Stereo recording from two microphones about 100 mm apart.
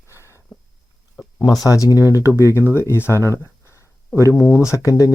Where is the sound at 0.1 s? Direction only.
30° left (ahead or behind).